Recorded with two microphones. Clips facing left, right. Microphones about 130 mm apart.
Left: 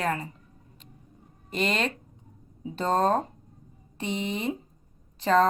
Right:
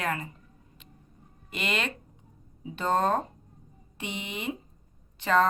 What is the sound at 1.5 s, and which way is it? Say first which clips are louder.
A woman's voice: left 4 dB; 35° left (ahead or behind).